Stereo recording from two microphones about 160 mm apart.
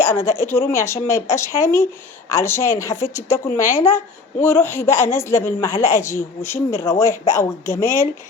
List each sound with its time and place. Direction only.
0.0 s speech: 15° left (ahead or behind)